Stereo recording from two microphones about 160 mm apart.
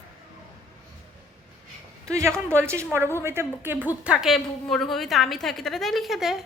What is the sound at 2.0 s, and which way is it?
A woman's voice, 20° right (ahead or behind).